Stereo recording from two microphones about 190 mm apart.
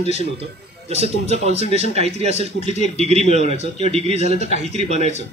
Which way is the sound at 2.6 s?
35° left (ahead or behind).